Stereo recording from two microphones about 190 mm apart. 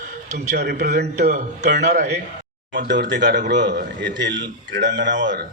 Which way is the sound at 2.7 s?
65° right (ahead or behind).